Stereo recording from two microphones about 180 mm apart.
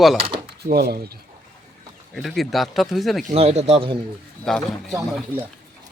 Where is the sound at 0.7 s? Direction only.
60° right (ahead or behind).